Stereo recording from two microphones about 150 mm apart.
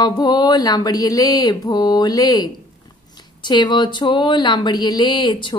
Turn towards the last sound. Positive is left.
turn(degrees=30)  # may be behind; listen again after turning